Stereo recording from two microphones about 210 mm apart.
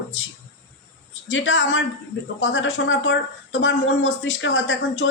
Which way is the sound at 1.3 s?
60° left (ahead or behind).